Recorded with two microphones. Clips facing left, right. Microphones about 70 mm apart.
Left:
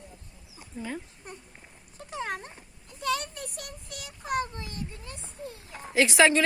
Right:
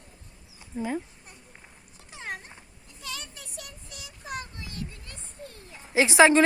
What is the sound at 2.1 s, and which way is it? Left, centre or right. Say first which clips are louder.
Dog: left 4 dB; left.